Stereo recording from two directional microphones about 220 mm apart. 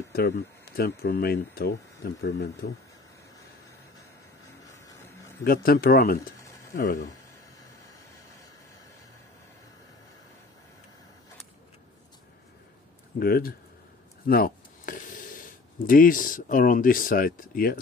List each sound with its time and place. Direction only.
0.1 s speech: 45° left (ahead or behind)
4.8 s a sound: 10° left (ahead or behind)
5.4 s speech: 40° left (ahead or behind)
13.2 s speech: 40° left (ahead or behind)
14.2 s a sound: 40° left (ahead or behind)
15.9 s speech: 40° left (ahead or behind)